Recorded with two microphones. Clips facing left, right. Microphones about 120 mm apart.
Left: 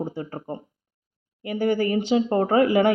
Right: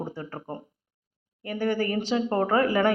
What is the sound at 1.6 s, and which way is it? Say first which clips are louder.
Speech: left 4 dB; 35° right (ahead or behind).